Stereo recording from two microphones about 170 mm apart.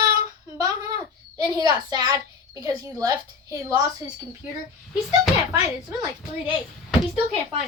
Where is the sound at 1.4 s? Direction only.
25° right (ahead or behind).